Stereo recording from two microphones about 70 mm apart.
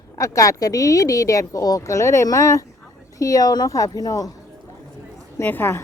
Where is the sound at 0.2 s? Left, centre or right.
Left.